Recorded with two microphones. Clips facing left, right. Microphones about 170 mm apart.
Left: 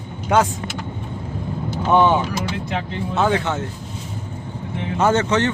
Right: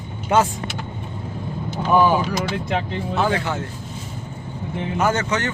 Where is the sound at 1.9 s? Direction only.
25° left (ahead or behind).